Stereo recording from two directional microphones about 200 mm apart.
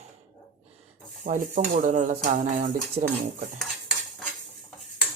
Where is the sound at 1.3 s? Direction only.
40° right (ahead or behind).